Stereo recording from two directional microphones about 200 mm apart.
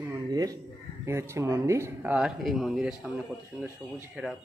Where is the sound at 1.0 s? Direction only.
15° right (ahead or behind).